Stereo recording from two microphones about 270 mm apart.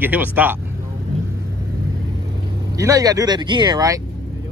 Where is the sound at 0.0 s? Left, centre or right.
Centre.